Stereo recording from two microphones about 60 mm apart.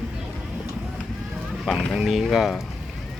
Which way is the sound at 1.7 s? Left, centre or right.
Centre.